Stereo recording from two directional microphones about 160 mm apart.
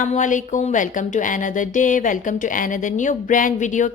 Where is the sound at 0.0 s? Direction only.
50° left (ahead or behind).